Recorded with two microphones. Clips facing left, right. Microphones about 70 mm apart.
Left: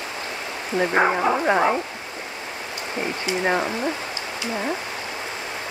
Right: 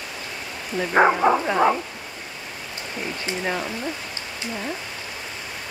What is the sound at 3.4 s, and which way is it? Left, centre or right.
Speech, left.